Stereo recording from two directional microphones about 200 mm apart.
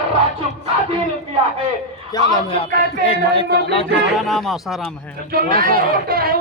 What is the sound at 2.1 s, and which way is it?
Speech, 25° left (ahead or behind).